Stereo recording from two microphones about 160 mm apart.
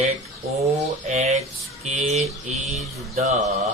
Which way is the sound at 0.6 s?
45° right (ahead or behind).